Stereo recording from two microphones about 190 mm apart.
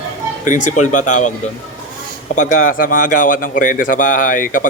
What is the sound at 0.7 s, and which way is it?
Speech, 40° left (ahead or behind).